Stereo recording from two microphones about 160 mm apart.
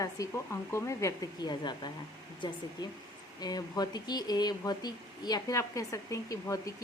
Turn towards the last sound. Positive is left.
turn(degrees=20)  # may be behind; listen again after turning